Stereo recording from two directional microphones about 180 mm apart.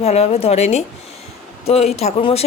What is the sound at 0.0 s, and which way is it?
A woman's voice, 35° left (ahead or behind).